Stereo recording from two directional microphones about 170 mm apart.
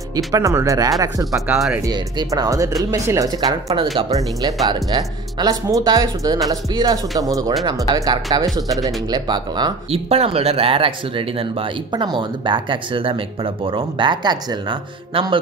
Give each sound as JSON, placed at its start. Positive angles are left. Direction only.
{"t": 0.3, "sound": "speech", "side_deg": -20}
{"t": 9.8, "sound": "speech", "side_deg": -35}